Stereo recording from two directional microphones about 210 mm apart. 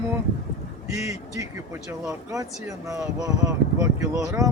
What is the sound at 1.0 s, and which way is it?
Speech, 15° right (ahead or behind).